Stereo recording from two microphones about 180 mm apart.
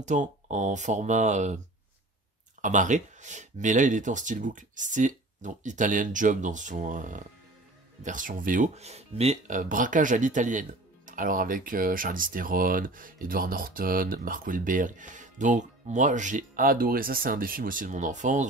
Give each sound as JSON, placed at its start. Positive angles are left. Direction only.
{"t": 0.0, "sound": "speech", "side_deg": -40}
{"t": 2.6, "sound": "speech", "side_deg": -40}